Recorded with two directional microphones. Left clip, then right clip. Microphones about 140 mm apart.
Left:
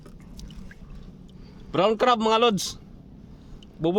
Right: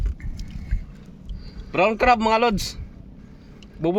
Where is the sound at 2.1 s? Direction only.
20° left (ahead or behind).